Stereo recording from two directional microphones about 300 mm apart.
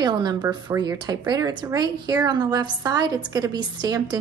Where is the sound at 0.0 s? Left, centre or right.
Centre.